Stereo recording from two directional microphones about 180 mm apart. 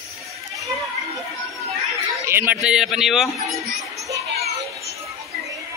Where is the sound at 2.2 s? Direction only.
10° right (ahead or behind).